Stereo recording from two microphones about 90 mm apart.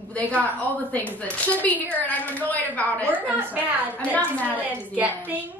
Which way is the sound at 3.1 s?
20° right (ahead or behind).